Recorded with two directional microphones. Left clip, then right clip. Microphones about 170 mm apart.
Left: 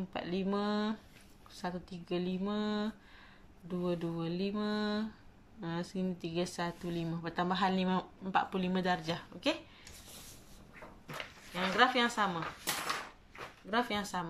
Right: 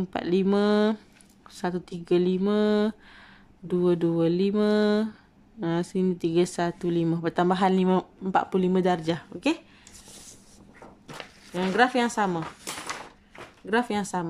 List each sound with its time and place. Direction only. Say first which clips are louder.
0.1 s speech: right 12 dB; 50° right (ahead or behind)
11.1 s a sound: right 3 dB; 35° right (ahead or behind)
13.7 s speech: right 8 dB; 40° right (ahead or behind)